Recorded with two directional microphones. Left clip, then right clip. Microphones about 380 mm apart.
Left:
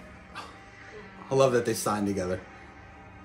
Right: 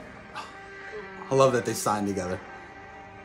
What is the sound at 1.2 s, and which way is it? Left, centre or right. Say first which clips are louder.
Speech: right 1 dB; centre.